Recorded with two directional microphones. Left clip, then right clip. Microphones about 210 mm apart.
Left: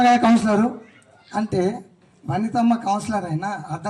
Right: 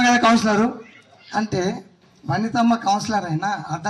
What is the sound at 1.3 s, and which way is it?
Speech, 20° left (ahead or behind).